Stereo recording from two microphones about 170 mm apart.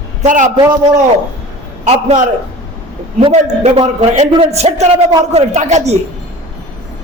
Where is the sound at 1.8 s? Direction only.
45° right (ahead or behind).